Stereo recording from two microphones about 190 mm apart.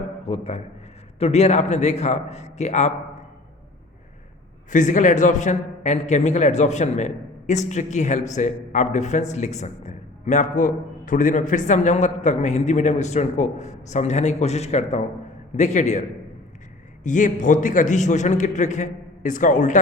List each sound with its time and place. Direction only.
0.3 s a man's voice: 35° left (ahead or behind)
4.7 s a man's voice: 40° left (ahead or behind)